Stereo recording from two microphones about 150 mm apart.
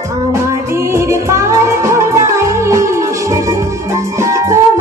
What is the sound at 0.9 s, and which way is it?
Music, 20° right (ahead or behind).